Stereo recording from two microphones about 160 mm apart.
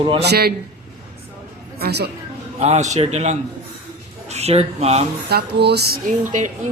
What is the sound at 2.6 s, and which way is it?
A man's voice, 45° right (ahead or behind).